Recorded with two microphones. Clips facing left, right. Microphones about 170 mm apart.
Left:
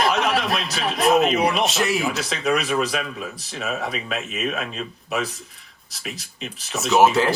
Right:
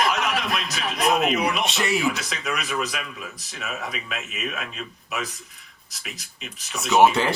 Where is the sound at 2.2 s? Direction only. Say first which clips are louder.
Left 7 dB; 30° left (ahead or behind).